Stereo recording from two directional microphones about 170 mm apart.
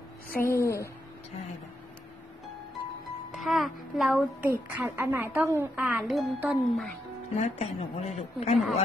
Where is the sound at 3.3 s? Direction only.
Centre (ahead or behind).